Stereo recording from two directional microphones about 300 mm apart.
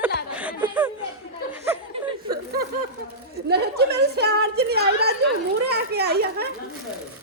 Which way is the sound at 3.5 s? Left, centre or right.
Right.